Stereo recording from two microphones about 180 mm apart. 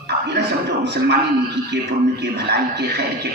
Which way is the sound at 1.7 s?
85° right.